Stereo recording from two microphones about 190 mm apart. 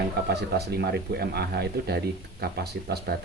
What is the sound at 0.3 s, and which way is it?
Speech, 55° right (ahead or behind).